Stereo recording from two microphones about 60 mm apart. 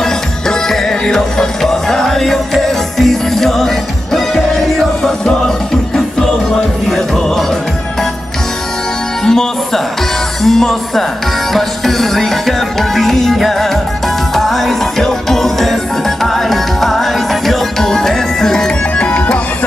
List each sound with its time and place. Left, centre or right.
0.0 s music: centre
5.9 s music: centre
9.2 s music: centre
10.4 s speech: centre
11.5 s music: centre
18.9 s music: left